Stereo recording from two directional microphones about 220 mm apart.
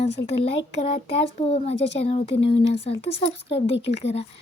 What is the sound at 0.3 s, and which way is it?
Speech, 30° left (ahead or behind).